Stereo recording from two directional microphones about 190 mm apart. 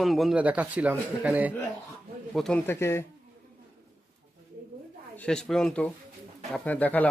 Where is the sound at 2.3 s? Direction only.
5° left (ahead or behind).